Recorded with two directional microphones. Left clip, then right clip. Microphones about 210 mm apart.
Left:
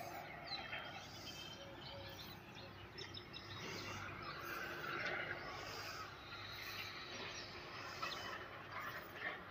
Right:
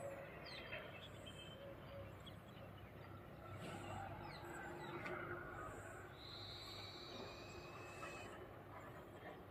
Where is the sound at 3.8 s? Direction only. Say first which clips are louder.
Left 3 dB; 60° right (ahead or behind); by 5.6 s 40° right (ahead or behind).